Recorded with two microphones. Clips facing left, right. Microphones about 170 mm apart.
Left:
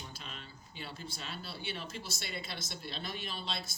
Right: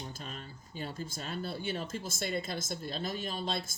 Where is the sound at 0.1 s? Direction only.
45° right (ahead or behind).